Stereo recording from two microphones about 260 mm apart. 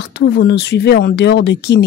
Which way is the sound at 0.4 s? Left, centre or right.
Left.